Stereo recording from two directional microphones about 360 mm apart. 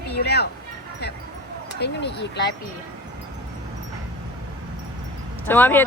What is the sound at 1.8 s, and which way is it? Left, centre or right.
Speech, left.